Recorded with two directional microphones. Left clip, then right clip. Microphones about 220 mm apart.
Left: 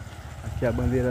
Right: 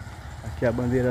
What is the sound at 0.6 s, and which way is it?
Speech, 10° right (ahead or behind).